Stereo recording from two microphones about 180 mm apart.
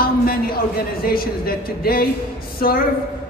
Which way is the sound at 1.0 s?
55° left (ahead or behind).